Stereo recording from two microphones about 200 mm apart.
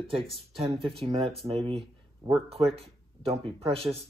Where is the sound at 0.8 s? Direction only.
30° right (ahead or behind).